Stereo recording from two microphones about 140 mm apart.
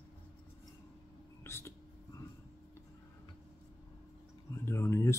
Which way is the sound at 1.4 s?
20° left (ahead or behind).